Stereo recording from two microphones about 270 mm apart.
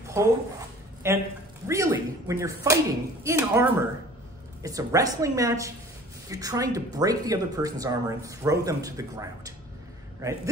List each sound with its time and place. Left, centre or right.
0.2 s speech: centre